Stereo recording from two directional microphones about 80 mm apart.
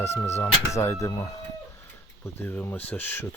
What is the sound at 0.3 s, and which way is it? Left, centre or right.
Speech, left.